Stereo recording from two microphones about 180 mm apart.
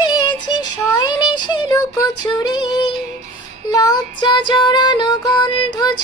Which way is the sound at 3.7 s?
20° left (ahead or behind).